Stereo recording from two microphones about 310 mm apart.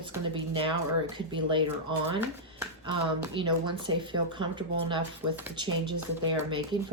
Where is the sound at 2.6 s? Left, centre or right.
Centre.